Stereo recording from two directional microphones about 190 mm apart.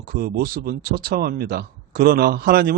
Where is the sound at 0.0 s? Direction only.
50° right (ahead or behind).